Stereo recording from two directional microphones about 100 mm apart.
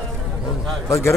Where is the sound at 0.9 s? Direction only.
25° left (ahead or behind).